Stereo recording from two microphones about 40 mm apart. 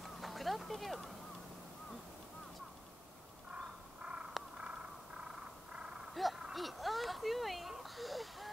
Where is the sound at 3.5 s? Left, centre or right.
Right.